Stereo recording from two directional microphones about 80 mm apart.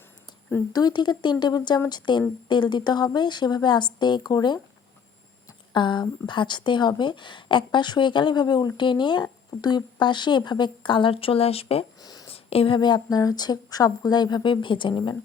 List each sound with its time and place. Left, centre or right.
0.7 s a woman's voice: left
5.7 s speech: left
11.9 s a sound: left
12.6 s a woman's voice: left